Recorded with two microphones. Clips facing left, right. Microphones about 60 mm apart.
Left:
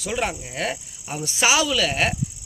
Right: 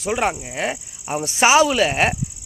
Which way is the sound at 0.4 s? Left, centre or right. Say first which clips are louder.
Right 3 dB; right.